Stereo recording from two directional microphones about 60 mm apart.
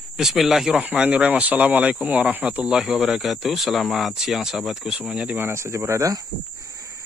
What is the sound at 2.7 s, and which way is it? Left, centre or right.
Speech, centre.